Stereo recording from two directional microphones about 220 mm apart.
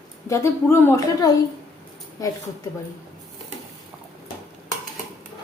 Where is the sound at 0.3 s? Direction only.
10° left (ahead or behind).